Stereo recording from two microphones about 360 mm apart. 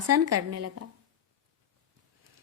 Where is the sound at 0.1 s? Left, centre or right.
Right.